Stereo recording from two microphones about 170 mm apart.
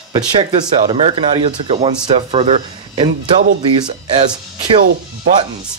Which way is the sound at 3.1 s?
55° right (ahead or behind).